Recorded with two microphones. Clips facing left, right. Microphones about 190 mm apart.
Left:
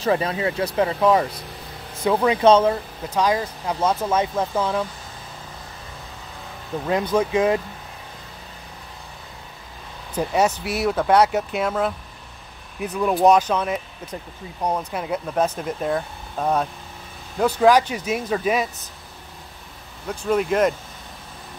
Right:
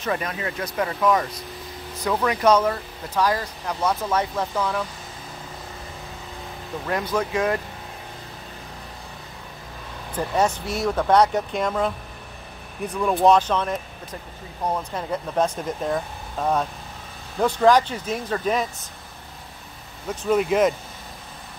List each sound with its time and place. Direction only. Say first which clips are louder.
0.0 s speech: left 6 dB; 30° left (ahead or behind)
6.9 s speech: left 4 dB; 20° left (ahead or behind)
10.1 s speech: left 2 dB; 10° left (ahead or behind)
20.1 s speech: even; 5° right (ahead or behind)